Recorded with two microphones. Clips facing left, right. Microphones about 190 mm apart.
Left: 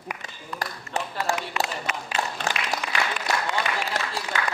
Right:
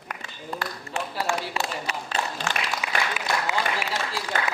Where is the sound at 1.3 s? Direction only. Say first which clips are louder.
Even; 35° right (ahead or behind).